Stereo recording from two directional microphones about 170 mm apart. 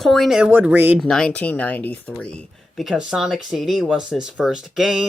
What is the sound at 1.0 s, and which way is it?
Speech, centre (ahead or behind).